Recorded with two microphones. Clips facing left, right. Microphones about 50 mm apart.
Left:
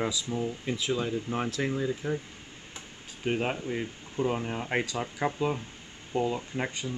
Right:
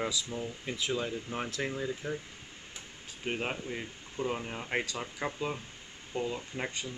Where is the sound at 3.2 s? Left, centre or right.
Centre.